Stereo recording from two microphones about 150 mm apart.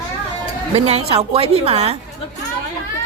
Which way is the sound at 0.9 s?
40° right (ahead or behind).